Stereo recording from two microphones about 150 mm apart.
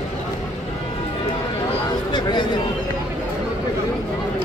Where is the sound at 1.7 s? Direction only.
30° left (ahead or behind).